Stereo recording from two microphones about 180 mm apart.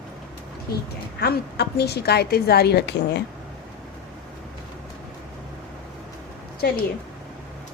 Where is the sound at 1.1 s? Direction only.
65° left (ahead or behind).